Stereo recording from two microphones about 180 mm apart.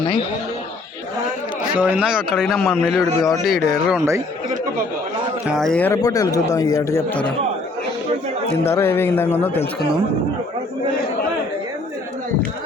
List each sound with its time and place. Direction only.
1.7 s a man's voice: 5° right (ahead or behind)
4.0 s chatter: 15° right (ahead or behind)
5.5 s a man's voice: centre (ahead or behind)
6.0 s a man's voice: 20° left (ahead or behind)
8.7 s a man's voice: 15° left (ahead or behind)